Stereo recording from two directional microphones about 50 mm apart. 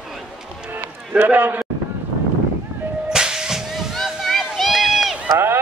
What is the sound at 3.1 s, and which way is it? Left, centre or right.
Whip, centre.